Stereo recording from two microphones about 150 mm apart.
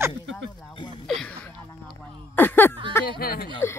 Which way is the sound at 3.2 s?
80° left.